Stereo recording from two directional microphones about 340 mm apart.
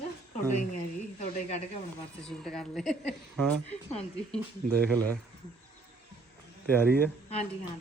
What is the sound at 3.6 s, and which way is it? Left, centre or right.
Speech, centre.